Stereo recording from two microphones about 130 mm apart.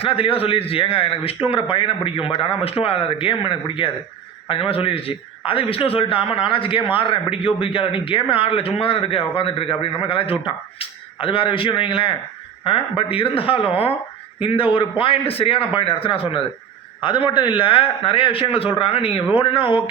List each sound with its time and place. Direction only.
0.0 s a man's voice: 45° left (ahead or behind)